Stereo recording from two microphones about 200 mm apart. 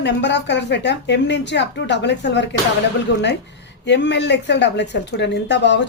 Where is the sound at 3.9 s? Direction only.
60° left (ahead or behind).